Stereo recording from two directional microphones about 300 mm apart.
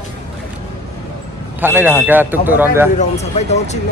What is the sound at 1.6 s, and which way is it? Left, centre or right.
A man's voice, centre.